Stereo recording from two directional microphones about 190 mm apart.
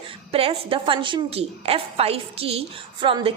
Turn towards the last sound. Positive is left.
turn(degrees=-25)  # may be behind; listen again after turning